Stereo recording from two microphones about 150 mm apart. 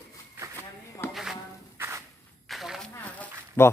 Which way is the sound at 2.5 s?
Centre (ahead or behind).